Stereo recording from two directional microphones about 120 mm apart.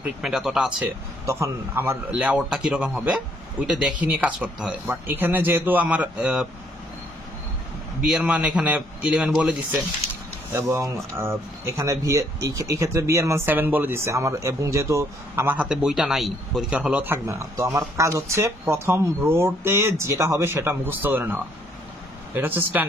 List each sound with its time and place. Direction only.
0.0 s speech: 5° right (ahead or behind)
1.2 s speech: 25° right (ahead or behind); by 6.4 s 10° right (ahead or behind)
8.1 s speech: 10° right (ahead or behind)
10.7 s speech: 25° right (ahead or behind); by 16.6 s centre (ahead or behind)
16.7 s speech: 10° right (ahead or behind)